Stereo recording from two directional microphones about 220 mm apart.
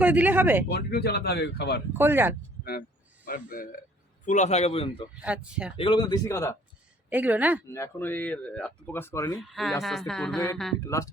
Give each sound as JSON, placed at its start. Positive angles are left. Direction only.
{"t": 0.0, "sound": "speech", "side_deg": -5}
{"t": 0.7, "sound": "speech", "side_deg": 45}
{"t": 1.9, "sound": "speech", "side_deg": -10}
{"t": 3.2, "sound": "a man's voice", "side_deg": 40}
{"t": 5.2, "sound": "speech", "side_deg": -5}
{"t": 5.7, "sound": "speech", "side_deg": 25}
{"t": 7.1, "sound": "speech", "side_deg": -5}
{"t": 7.7, "sound": "speech", "side_deg": 10}
{"t": 9.4, "sound": "speech", "side_deg": 0}
{"t": 10.8, "sound": "speech", "side_deg": 15}